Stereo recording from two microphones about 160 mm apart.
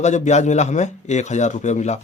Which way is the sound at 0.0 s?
45° left (ahead or behind).